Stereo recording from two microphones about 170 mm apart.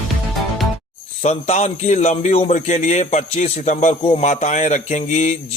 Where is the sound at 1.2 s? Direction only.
40° left (ahead or behind).